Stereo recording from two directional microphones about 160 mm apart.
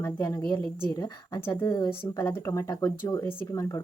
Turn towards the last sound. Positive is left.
turn(degrees=20)  # may be behind; listen again after turning